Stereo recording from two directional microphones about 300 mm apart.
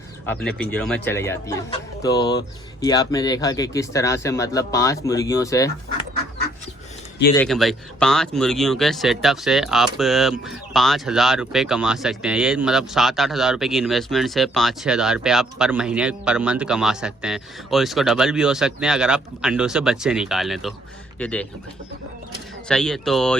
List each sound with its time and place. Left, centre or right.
0.3 s speech: centre
7.3 s speech: centre
22.7 s speech: centre